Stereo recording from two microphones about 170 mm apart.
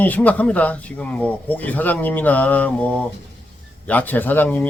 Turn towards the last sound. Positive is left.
turn(degrees=10)  # may be behind; listen again after turning